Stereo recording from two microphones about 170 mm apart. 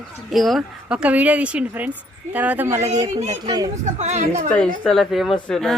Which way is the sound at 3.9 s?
40° right (ahead or behind).